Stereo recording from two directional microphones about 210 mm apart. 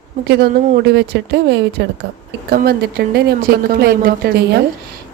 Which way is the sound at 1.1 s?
55° right (ahead or behind).